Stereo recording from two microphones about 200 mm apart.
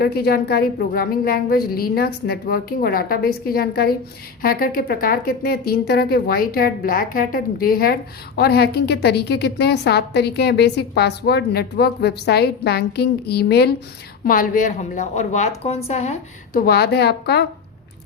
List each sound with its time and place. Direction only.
0.0 s a woman's voice: 50° left (ahead or behind); by 16.1 s 30° left (ahead or behind)
16.5 s a woman's voice: 50° left (ahead or behind)